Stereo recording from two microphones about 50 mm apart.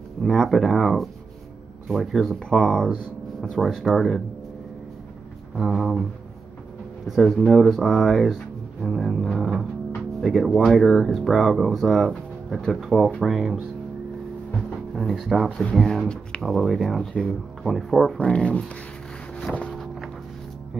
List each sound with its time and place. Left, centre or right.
0.2 s speech: centre
2.9 s speech: centre
5.7 s speech: centre
7.1 s speech: centre
15.0 s speech: centre
15.7 s speech: centre
18.1 s speech: left